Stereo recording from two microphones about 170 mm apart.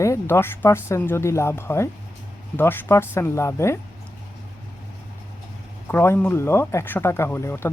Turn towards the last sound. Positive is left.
turn(degrees=15)  # may be behind; listen again after turning